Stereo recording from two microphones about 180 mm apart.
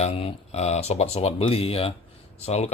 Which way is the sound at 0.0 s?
35° left (ahead or behind).